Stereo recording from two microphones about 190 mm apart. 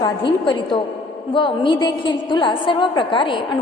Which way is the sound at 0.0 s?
25° left (ahead or behind).